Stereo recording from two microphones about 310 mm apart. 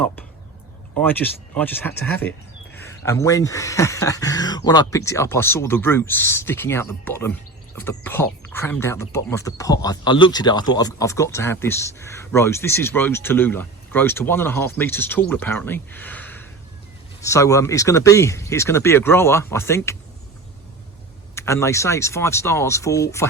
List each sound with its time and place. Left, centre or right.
0.9 s speech: centre
21.3 s speech: centre